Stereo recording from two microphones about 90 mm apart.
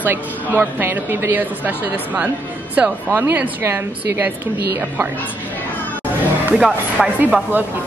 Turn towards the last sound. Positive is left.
turn(degrees=-15)  # may be behind; listen again after turning